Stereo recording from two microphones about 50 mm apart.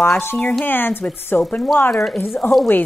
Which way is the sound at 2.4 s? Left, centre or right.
Left.